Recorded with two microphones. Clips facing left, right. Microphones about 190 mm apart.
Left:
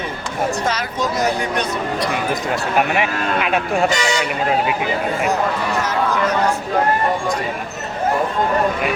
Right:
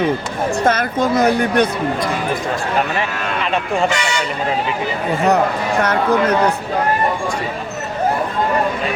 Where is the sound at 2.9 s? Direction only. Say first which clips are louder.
Left 2 dB; 10° left (ahead or behind).